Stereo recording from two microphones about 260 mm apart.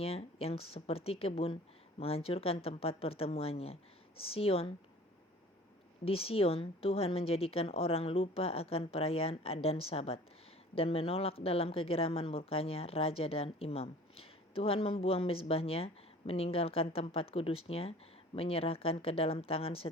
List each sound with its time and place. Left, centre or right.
0.0 s speech: left
6.1 s speech: left